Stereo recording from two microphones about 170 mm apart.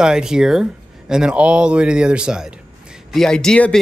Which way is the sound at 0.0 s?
5° right (ahead or behind).